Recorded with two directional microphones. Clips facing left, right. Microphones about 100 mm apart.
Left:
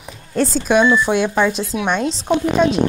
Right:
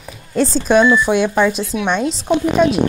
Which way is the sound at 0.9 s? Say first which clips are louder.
Right 2 dB; 15° right (ahead or behind).